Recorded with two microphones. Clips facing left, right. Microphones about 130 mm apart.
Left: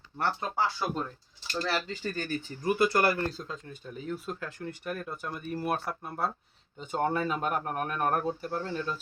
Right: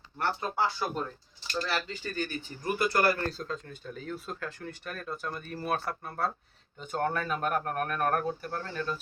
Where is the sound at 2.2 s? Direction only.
40° left (ahead or behind).